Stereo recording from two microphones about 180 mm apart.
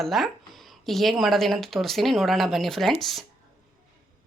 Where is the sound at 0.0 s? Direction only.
Centre (ahead or behind).